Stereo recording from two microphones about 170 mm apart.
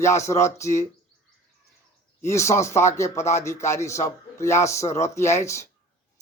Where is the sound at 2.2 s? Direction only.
15° left (ahead or behind).